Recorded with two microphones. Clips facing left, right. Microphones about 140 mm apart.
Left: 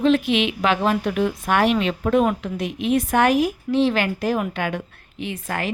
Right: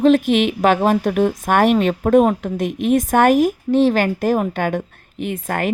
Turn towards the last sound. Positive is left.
turn(degrees=-50)  # may be behind; listen again after turning